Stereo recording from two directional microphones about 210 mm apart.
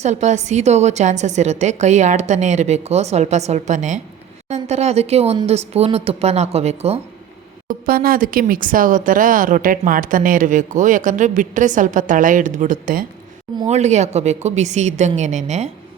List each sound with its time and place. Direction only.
0.0 s speech: 35° right (ahead or behind)
7.7 s speech: 45° right (ahead or behind)